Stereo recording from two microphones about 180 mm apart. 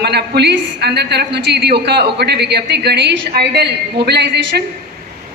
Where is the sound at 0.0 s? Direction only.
65° right (ahead or behind).